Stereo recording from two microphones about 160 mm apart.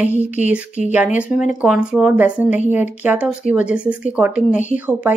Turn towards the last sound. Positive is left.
turn(degrees=-10)  # may be behind; listen again after turning